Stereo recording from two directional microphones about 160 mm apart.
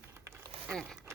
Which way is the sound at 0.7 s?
5° left (ahead or behind).